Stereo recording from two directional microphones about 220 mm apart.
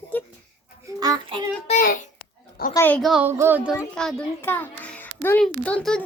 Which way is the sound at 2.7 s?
10° left (ahead or behind).